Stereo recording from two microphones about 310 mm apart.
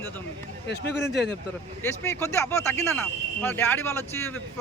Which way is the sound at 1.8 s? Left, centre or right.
Centre.